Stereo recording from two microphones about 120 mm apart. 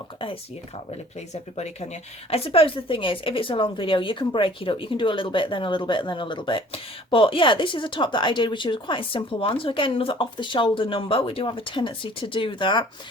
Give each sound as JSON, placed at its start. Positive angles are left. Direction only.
{"t": 1.3, "sound": "speech", "side_deg": 65}